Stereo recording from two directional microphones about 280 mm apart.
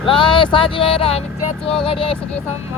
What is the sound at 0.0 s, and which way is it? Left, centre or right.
Speech, centre.